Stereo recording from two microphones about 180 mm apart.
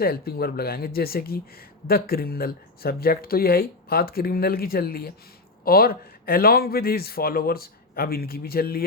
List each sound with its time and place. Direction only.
0.0 s speech: 60° left (ahead or behind)